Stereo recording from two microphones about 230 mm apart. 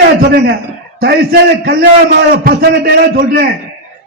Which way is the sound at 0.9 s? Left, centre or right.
Right.